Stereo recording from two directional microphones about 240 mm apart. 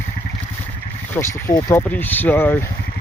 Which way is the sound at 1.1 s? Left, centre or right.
Centre.